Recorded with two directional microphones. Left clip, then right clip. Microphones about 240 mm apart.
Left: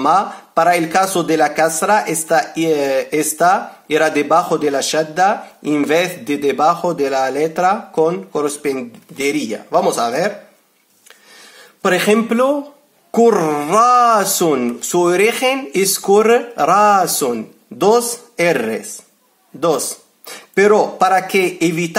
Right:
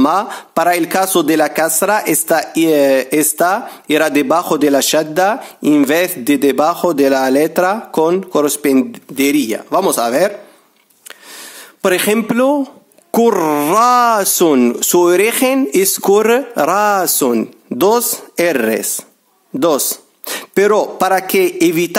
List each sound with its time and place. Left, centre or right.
0.0 s speech: right
11.8 s speech: right
20.2 s speech: right